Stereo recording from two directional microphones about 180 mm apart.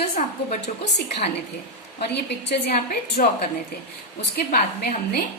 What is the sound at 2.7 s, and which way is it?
Speech, 50° left (ahead or behind).